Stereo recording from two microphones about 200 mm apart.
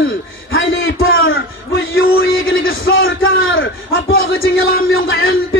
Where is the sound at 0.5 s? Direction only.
75° left (ahead or behind).